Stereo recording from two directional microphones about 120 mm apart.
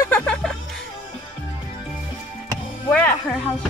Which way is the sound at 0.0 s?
10° left (ahead or behind).